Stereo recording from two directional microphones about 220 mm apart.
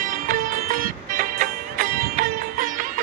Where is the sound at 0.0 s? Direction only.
35° right (ahead or behind).